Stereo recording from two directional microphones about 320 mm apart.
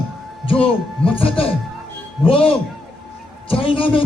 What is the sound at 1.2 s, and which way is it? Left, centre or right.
Speech, centre.